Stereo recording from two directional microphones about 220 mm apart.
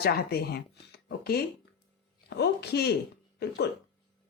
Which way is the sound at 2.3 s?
50° left (ahead or behind).